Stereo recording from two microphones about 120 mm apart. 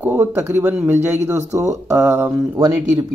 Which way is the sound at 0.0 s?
15° right (ahead or behind).